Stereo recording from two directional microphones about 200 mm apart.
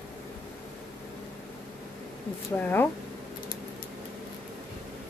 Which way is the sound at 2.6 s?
10° left (ahead or behind).